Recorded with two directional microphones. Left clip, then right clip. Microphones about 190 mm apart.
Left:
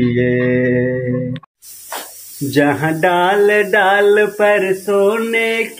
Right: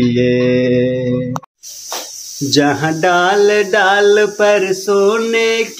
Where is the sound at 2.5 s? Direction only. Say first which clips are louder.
Right 1 dB; 15° right (ahead or behind).